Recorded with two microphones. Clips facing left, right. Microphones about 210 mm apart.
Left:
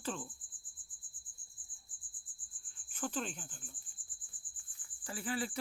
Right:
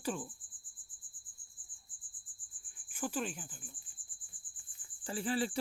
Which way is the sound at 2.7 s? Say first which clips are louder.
Right 2 dB; 10° right (ahead or behind).